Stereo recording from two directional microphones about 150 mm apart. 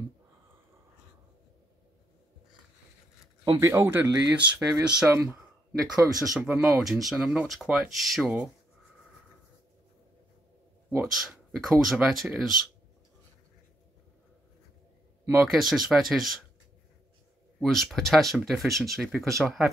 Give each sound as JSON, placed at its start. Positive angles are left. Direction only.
{"t": 3.4, "sound": "speech", "side_deg": -20}
{"t": 6.4, "sound": "speech", "side_deg": 0}
{"t": 11.0, "sound": "speech", "side_deg": 0}
{"t": 15.5, "sound": "speech", "side_deg": 0}
{"t": 17.6, "sound": "speech", "side_deg": 0}